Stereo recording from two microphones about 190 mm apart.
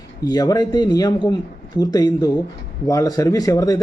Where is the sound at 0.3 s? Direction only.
20° left (ahead or behind).